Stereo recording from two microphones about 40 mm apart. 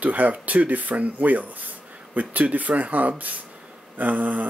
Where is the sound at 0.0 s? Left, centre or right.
Right.